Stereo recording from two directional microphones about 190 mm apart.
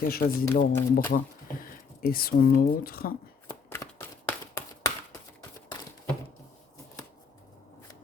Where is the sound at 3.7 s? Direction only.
10° left (ahead or behind).